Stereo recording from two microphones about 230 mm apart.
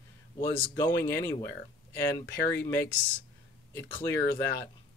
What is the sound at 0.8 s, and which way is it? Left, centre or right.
Speech, centre.